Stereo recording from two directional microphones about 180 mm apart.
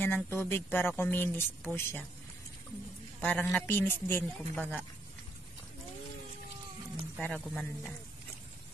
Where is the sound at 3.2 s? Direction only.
10° left (ahead or behind).